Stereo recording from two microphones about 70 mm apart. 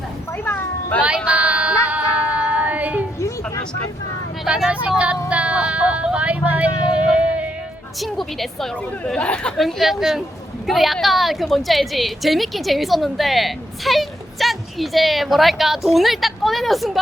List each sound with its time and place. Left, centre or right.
0.4 s a sound: left
1.0 s music: centre
3.2 s a sound: left
4.4 s speech: centre
5.3 s vehicle: centre
8.0 s a woman's voice: centre
9.1 s speech: centre
9.6 s a woman's voice: centre